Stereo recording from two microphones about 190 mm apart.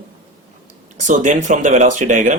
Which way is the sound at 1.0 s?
40° right (ahead or behind).